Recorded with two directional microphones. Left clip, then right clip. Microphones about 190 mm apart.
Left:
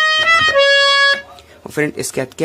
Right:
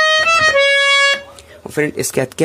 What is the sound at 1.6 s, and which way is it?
Speech, 5° right (ahead or behind).